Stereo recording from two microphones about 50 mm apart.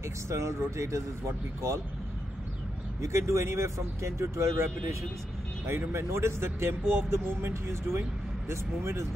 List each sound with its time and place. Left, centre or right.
0.3 s speech: right
3.0 s speech: right
5.7 s speech: right